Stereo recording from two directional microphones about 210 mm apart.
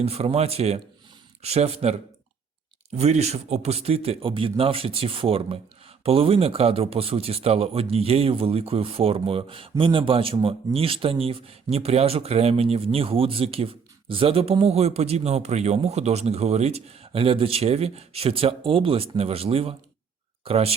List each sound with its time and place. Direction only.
0.0 s speech: 30° right (ahead or behind)